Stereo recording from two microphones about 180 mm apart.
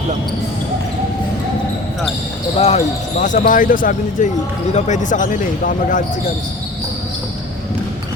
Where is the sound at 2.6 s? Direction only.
40° left (ahead or behind).